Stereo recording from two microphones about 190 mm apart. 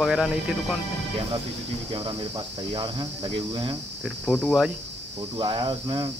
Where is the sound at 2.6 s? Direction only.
25° right (ahead or behind).